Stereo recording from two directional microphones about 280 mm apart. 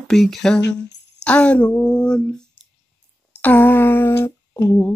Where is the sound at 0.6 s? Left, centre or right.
Left.